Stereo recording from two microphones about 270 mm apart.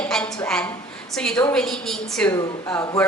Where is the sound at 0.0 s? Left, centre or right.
Centre.